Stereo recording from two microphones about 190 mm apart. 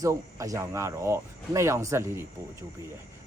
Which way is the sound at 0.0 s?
15° right (ahead or behind).